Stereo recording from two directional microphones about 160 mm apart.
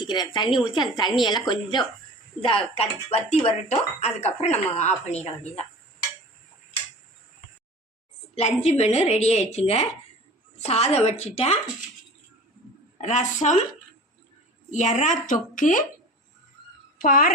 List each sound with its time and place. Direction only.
0.0 s a woman's voice: 30° left (ahead or behind)
8.8 s speech: 40° left (ahead or behind)
13.0 s a woman's voice: 50° left (ahead or behind)
14.7 s a woman's voice: 50° left (ahead or behind)
17.0 s speech: 60° left (ahead or behind)